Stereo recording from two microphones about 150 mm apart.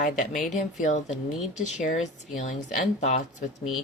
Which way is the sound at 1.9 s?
55° left (ahead or behind).